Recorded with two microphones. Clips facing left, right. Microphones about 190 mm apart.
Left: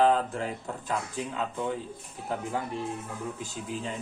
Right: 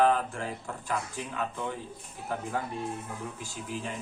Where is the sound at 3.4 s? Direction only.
20° left (ahead or behind).